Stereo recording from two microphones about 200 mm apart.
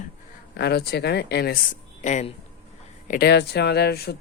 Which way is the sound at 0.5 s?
55° left (ahead or behind).